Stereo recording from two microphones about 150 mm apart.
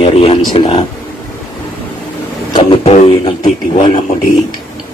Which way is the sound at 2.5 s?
35° left (ahead or behind).